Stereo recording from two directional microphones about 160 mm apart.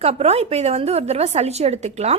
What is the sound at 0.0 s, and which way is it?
A woman's voice, 40° right (ahead or behind).